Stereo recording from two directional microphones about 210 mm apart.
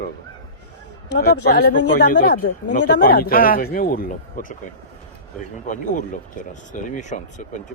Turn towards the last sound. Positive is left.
turn(degrees=35)  # may be behind; listen again after turning